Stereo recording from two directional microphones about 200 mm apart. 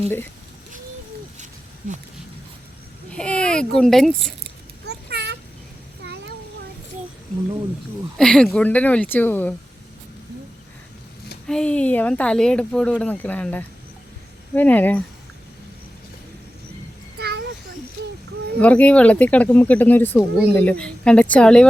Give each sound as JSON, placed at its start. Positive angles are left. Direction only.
{"t": 3.1, "sound": "speech", "side_deg": 5}
{"t": 4.9, "sound": "a sound", "side_deg": -55}
{"t": 8.2, "sound": "speech", "side_deg": 5}
{"t": 11.4, "sound": "speech", "side_deg": 5}
{"t": 17.2, "sound": "a sound", "side_deg": -55}
{"t": 18.6, "sound": "speech", "side_deg": 5}